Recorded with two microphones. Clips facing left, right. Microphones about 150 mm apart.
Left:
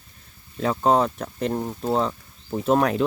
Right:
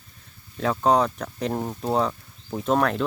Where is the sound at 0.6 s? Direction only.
5° left (ahead or behind).